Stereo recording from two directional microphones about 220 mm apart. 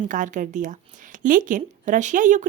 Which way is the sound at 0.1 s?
35° right (ahead or behind).